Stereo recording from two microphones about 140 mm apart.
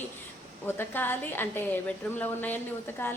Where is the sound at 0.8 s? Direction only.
15° left (ahead or behind).